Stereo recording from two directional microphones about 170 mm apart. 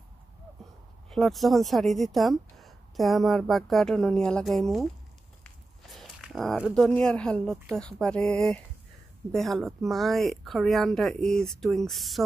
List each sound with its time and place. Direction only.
1.1 s speech: centre (ahead or behind)